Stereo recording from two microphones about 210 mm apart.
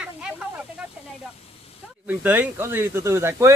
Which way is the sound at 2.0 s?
10° right (ahead or behind).